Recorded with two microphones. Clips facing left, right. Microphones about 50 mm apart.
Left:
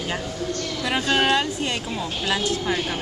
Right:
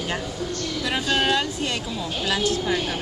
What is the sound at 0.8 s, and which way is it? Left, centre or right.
Speech, centre.